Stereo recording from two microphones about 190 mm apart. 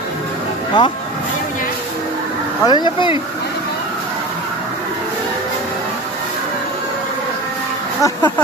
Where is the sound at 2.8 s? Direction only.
25° left (ahead or behind).